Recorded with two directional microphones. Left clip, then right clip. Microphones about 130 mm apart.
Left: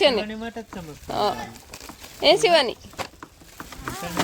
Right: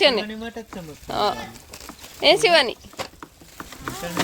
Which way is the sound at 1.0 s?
15° left (ahead or behind).